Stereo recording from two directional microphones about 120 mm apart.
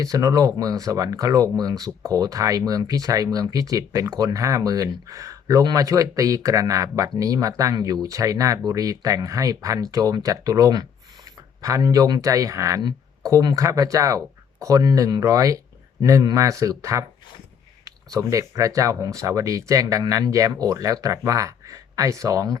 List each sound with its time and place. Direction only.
0.0 s speech: 30° right (ahead or behind)